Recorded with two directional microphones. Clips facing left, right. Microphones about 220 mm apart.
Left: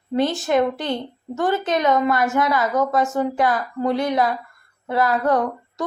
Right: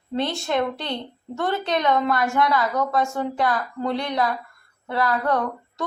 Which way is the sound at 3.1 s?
20° left (ahead or behind).